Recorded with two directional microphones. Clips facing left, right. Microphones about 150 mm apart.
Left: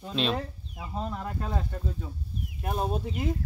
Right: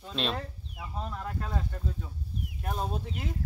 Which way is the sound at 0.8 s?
25° left (ahead or behind).